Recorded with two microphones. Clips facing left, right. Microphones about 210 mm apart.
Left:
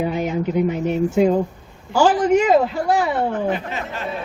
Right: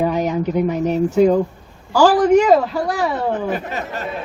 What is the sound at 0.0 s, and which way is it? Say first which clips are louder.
Speech: right 3 dB; 40° right (ahead or behind).